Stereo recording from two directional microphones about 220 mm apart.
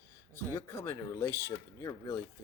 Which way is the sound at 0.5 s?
10° left (ahead or behind).